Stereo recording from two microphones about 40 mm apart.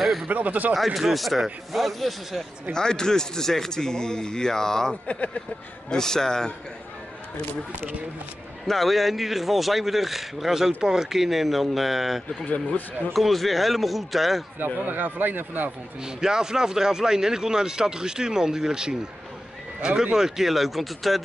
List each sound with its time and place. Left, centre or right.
0.3 s speech: right
0.7 s speech: centre
2.7 s a man's voice: centre
5.0 s speech: left
5.9 s a man's voice: centre
8.6 s speech: centre
12.4 s speech: left
13.1 s speech: centre
14.8 s speech: right
16.0 s speech: centre
20.2 s speech: centre